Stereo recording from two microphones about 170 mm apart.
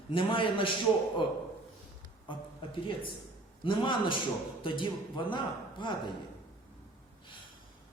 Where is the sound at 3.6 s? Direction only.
30° left (ahead or behind).